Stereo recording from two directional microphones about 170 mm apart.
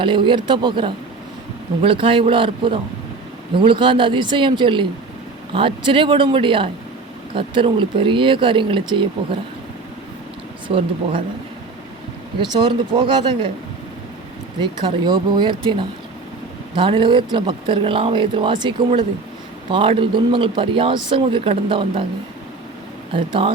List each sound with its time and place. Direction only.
0.0 s speech: 30° right (ahead or behind)
10.7 s speech: 35° right (ahead or behind)
12.4 s speech: 30° right (ahead or behind)
14.6 s speech: 25° right (ahead or behind)
23.1 s speech: 30° right (ahead or behind)